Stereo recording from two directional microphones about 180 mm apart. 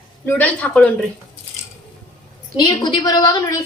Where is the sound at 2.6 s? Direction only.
25° left (ahead or behind).